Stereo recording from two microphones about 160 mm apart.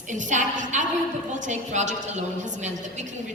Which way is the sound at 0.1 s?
50° right (ahead or behind).